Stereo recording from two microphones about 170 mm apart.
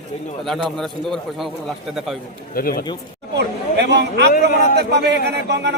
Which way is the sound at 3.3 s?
85° right.